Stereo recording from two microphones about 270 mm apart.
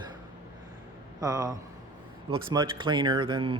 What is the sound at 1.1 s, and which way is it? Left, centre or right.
A man's voice, centre.